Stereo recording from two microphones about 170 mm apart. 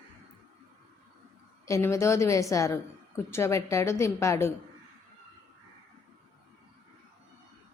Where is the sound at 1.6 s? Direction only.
15° left (ahead or behind).